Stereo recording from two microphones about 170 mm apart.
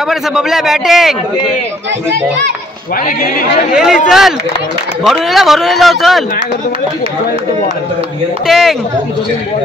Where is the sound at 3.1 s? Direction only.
55° left (ahead or behind).